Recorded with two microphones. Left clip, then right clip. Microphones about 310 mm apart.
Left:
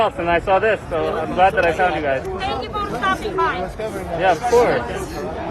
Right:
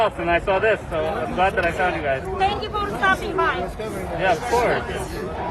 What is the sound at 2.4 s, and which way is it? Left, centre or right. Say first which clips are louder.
Speech: right 1 dB; centre.